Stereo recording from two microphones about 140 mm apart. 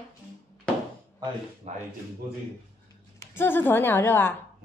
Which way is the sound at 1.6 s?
50° right (ahead or behind).